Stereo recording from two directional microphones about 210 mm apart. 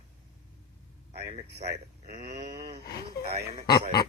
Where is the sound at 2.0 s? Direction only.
30° right (ahead or behind).